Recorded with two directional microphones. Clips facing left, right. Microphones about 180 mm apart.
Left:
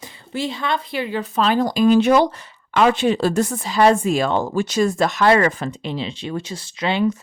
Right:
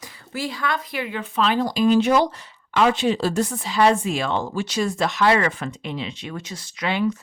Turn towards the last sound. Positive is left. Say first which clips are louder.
# left 3 dB
turn(degrees=25)  # may be behind; listen again after turning